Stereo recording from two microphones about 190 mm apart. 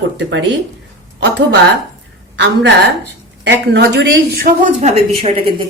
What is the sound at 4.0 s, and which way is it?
Speech, 55° right (ahead or behind).